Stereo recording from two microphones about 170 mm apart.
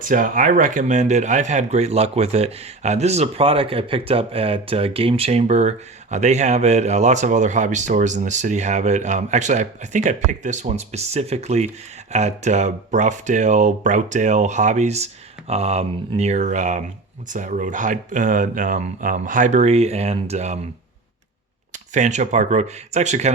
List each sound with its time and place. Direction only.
0.0 s speech: 50° right (ahead or behind)
21.9 s speech: 45° right (ahead or behind)